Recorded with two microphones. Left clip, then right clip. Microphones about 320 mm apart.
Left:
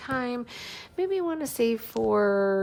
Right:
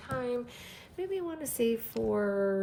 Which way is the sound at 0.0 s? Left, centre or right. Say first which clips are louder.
Left 4 dB; left.